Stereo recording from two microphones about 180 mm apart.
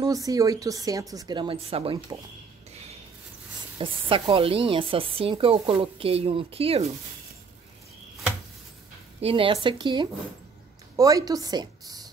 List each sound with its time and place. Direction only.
0.0 s a woman's voice: 20° right (ahead or behind)
2.7 s a sound: 35° right (ahead or behind)
3.7 s speech: 30° right (ahead or behind)
9.2 s a woman's voice: 30° right (ahead or behind)